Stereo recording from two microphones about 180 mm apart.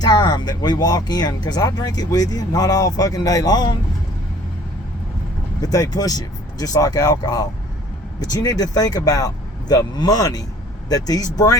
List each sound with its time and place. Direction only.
0.0 s speech: 25° left (ahead or behind)
5.6 s speech: 20° left (ahead or behind)